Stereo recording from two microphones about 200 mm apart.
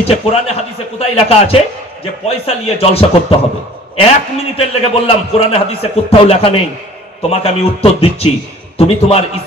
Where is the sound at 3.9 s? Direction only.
30° left (ahead or behind).